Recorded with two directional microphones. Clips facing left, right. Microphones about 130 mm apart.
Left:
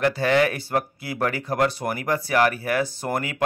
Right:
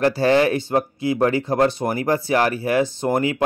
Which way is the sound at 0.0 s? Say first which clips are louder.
Right 4 dB; 30° right (ahead or behind).